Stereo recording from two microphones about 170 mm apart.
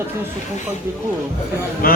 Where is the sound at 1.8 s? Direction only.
60° left (ahead or behind).